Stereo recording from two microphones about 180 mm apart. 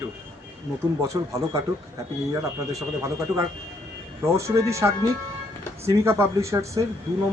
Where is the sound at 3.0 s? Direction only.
15° right (ahead or behind).